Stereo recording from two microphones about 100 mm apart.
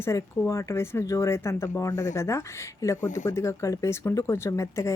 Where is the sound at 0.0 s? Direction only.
30° left (ahead or behind).